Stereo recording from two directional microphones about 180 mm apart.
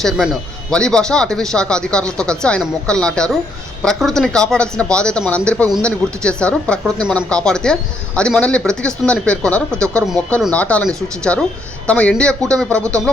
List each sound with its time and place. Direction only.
0.7 s speech: 5° left (ahead or behind)